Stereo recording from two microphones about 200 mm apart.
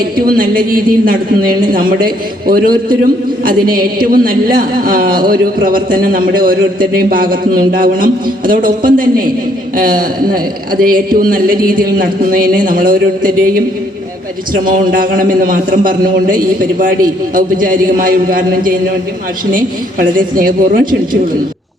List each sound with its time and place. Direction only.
0.0 s a man's voice: 45° right (ahead or behind)